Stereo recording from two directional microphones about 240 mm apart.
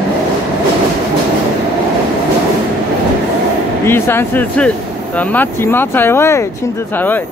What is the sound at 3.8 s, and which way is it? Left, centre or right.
Speech, centre.